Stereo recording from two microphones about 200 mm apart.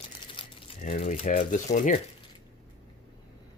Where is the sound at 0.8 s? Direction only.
40° left (ahead or behind).